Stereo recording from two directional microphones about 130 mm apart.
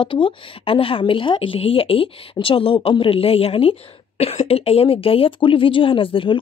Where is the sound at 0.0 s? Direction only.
40° left (ahead or behind).